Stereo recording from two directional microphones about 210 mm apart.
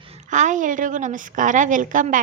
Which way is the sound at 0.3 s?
35° right (ahead or behind).